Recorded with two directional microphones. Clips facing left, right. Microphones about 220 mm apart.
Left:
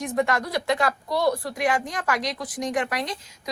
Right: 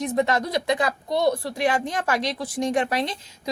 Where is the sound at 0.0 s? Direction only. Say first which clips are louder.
Right 2 dB; 25° right (ahead or behind).